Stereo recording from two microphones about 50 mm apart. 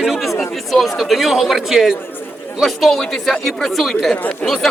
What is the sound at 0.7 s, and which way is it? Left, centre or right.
A man's voice, centre.